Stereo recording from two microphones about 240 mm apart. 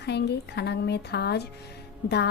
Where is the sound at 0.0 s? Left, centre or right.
Left.